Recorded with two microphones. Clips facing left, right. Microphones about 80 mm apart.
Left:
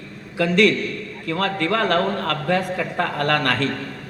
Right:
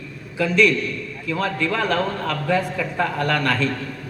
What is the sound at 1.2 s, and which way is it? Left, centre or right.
A man's voice, left.